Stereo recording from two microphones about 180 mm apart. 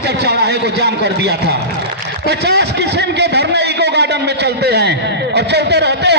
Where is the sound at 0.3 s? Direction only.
65° right (ahead or behind).